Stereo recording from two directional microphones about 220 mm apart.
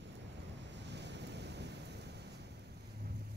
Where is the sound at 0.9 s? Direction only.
50° right (ahead or behind).